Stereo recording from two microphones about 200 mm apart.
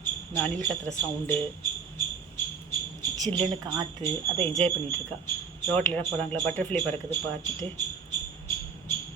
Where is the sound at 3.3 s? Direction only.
25° right (ahead or behind).